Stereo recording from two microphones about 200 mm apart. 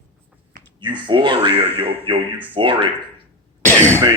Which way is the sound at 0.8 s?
25° right (ahead or behind).